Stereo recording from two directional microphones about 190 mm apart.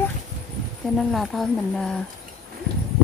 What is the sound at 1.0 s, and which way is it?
Speech, centre (ahead or behind).